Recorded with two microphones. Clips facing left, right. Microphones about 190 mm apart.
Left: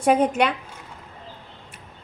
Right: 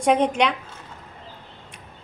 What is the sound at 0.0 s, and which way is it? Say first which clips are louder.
Speech: even; 5° left (ahead or behind).